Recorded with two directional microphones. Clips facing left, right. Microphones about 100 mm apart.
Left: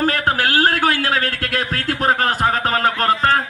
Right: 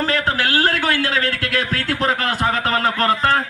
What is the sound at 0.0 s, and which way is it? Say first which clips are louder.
A man's voice: left 2 dB; 50° left (ahead or behind).